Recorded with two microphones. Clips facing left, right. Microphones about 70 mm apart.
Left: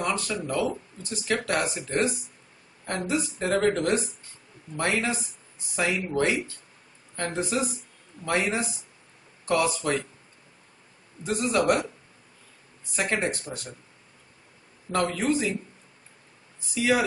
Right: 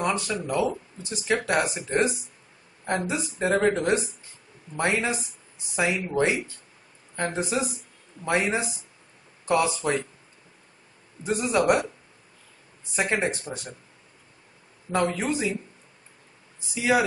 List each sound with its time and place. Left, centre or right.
0.0 s speech: centre
11.2 s speech: centre
12.9 s speech: centre
14.9 s speech: centre
16.7 s speech: centre